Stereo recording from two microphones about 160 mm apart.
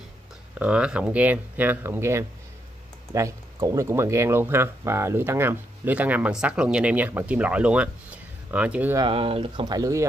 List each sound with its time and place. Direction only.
0.6 s speech: 5° right (ahead or behind)
8.9 s speech: 35° right (ahead or behind)